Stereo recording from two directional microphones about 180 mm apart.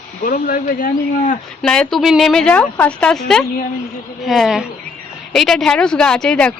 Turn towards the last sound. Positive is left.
turn(degrees=5)  # may be behind; listen again after turning